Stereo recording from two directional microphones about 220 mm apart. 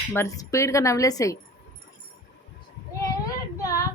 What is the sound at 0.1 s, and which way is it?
Speech, 10° left (ahead or behind).